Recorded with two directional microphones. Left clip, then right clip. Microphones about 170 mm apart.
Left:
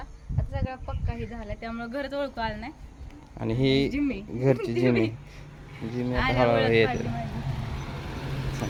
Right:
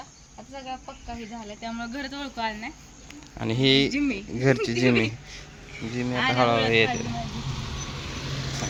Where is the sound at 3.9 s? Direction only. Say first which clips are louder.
Right 2 dB; 55° left (ahead or behind).